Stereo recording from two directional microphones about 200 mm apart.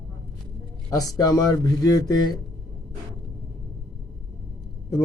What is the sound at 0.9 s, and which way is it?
A man's voice, 20° left (ahead or behind).